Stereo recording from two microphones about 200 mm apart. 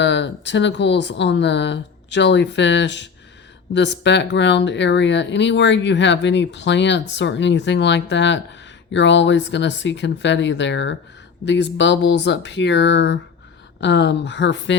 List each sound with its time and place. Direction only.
0.0 s speech: 60° left (ahead or behind)